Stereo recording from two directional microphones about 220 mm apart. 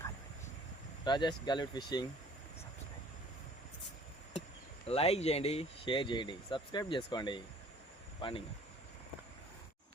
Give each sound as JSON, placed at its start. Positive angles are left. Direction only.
{"t": 1.0, "sound": "speech", "side_deg": 20}
{"t": 4.9, "sound": "speech", "side_deg": 25}